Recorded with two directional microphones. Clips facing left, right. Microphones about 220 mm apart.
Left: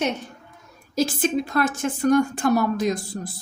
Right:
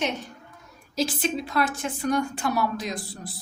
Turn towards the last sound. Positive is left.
turn(degrees=45)  # may be behind; listen again after turning